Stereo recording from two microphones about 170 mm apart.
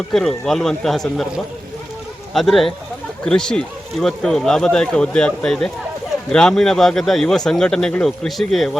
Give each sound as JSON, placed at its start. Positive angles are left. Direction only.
{"t": 0.1, "sound": "speech", "side_deg": 0}
{"t": 2.3, "sound": "speech", "side_deg": 0}